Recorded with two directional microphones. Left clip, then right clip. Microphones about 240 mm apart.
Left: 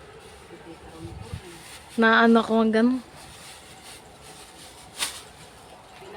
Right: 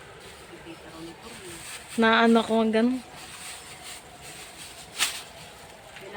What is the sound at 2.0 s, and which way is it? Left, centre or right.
Speech, centre.